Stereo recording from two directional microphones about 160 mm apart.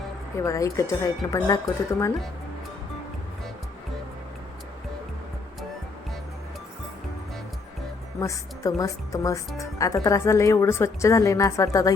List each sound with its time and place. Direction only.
0.4 s speech: 20° left (ahead or behind)
8.2 s speech: 20° left (ahead or behind)